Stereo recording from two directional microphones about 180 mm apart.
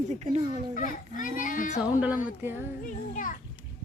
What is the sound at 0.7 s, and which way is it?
A child's voice, 45° left (ahead or behind).